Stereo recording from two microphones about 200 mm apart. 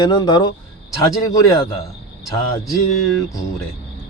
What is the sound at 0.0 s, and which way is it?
Speech, 20° left (ahead or behind).